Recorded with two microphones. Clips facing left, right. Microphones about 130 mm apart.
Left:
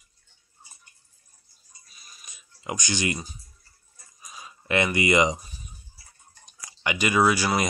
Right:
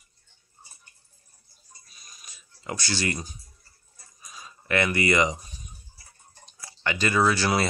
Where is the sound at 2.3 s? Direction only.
15° left (ahead or behind).